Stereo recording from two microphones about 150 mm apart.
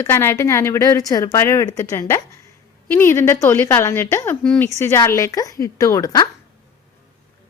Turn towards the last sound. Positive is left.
turn(degrees=25)  # may be behind; listen again after turning